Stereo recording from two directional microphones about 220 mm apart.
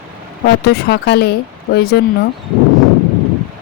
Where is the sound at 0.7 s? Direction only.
45° left (ahead or behind).